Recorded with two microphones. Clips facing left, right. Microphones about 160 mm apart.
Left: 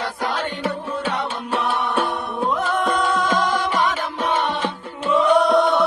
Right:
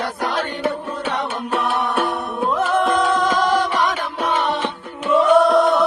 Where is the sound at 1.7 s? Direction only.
Centre (ahead or behind).